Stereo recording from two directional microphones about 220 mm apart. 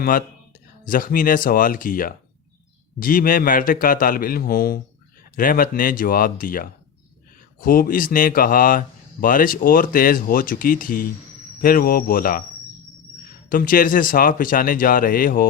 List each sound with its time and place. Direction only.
0.0 s speech: 40° left (ahead or behind)
13.5 s speech: 40° left (ahead or behind)